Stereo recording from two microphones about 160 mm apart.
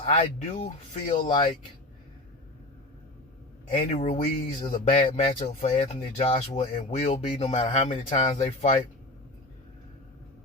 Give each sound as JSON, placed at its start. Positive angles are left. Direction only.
{"t": 0.0, "sound": "speech", "side_deg": 40}
{"t": 3.7, "sound": "speech", "side_deg": 40}